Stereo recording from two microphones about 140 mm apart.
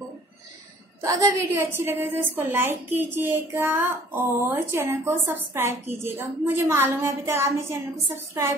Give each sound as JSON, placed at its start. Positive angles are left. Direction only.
{"t": 1.0, "sound": "a woman's voice", "side_deg": -25}